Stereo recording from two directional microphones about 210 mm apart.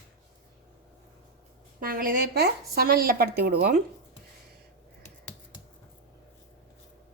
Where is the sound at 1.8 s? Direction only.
45° right (ahead or behind).